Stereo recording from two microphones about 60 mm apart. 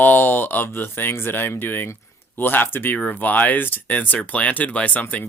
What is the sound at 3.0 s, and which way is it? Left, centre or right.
Speech, left.